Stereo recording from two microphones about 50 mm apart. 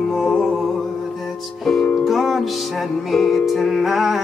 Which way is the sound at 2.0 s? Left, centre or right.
Centre.